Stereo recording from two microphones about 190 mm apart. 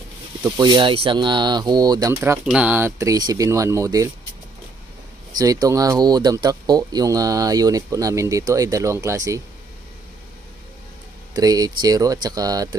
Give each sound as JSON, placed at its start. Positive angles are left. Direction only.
{"t": 0.4, "sound": "speech", "side_deg": -20}
{"t": 5.4, "sound": "speech", "side_deg": -20}
{"t": 11.3, "sound": "speech", "side_deg": -20}